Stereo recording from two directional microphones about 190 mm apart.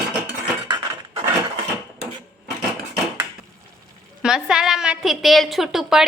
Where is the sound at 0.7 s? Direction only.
25° right (ahead or behind).